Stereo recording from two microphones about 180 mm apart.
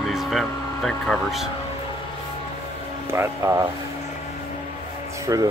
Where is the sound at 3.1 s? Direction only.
15° right (ahead or behind).